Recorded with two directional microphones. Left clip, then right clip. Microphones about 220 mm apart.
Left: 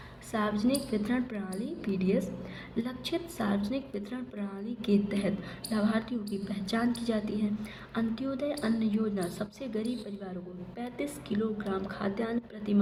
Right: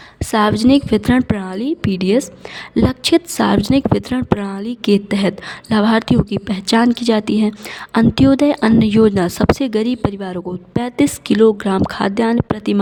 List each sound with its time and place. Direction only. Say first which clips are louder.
0.3 s a woman's voice: right 17 dB; 50° right (ahead or behind)